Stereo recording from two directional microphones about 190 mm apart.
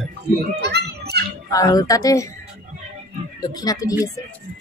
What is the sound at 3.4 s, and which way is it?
Speech, 20° left (ahead or behind).